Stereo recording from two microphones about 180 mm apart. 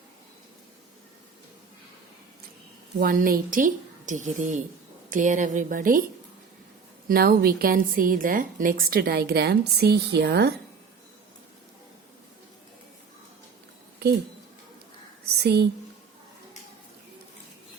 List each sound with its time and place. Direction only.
3.0 s a woman's voice: 50° right (ahead or behind)
7.1 s a woman's voice: 55° right (ahead or behind)
15.4 s a woman's voice: 65° right (ahead or behind)